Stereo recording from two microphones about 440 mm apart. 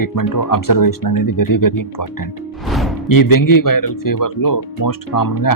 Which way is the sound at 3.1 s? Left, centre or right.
Left.